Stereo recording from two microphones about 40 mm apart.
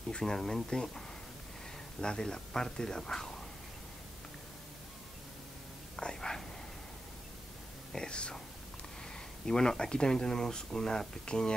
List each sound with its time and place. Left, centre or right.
0.2 s speech: centre
5.9 s whispering: centre
7.9 s speech: left